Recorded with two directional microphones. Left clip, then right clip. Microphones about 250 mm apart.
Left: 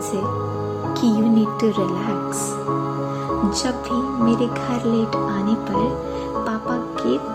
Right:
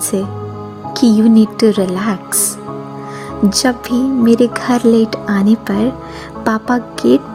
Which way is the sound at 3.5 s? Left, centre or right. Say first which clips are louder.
Right 7 dB; right.